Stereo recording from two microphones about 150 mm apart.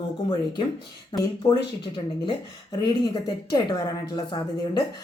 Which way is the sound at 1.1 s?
25° left (ahead or behind).